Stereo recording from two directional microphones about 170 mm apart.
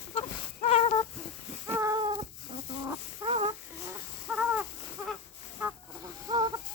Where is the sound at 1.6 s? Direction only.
20° right (ahead or behind).